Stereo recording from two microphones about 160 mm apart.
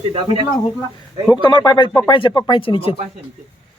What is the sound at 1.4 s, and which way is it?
Speech, 25° left (ahead or behind).